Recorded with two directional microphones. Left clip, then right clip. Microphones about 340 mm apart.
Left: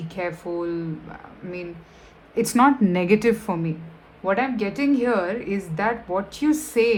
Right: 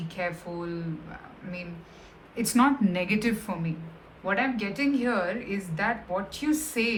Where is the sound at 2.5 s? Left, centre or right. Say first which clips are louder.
Left 5 dB; centre.